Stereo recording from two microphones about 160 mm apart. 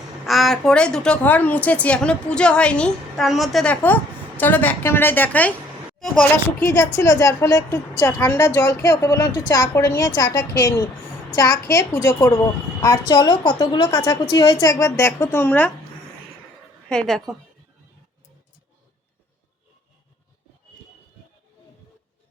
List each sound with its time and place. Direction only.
0.3 s a woman's voice: centre (ahead or behind)
16.9 s a woman's voice: 5° left (ahead or behind)